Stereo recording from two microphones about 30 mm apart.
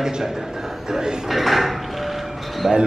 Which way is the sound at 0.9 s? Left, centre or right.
Right.